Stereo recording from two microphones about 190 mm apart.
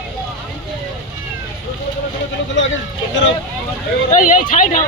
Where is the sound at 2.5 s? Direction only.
75° left (ahead or behind).